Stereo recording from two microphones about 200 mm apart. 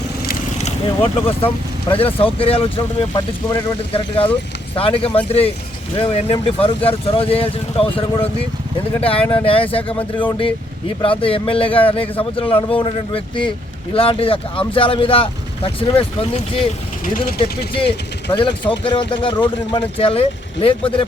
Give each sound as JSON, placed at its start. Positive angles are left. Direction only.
{"t": 0.6, "sound": "speech", "side_deg": 30}
{"t": 17.0, "sound": "speech", "side_deg": 45}
{"t": 17.4, "sound": "speech", "side_deg": 25}